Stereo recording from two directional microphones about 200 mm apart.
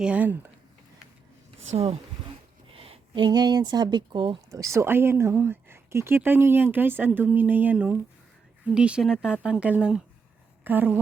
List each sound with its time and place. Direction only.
0.0 s a woman's voice: 5° right (ahead or behind)
1.7 s a woman's voice: 30° right (ahead or behind); by 10.0 s 5° right (ahead or behind)
10.6 s a sound: 10° right (ahead or behind)